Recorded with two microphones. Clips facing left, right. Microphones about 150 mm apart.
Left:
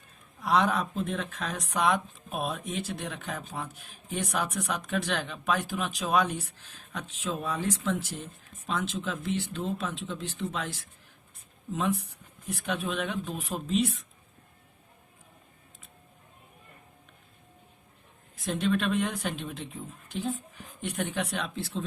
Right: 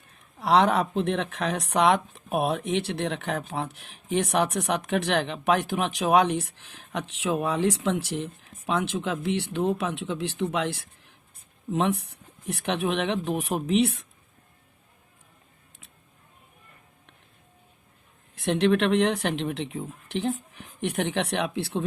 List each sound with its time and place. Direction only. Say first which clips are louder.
0.3 s speech: right 5 dB; 70° right (ahead or behind)
18.3 s speech: right 6 dB; 75° right (ahead or behind)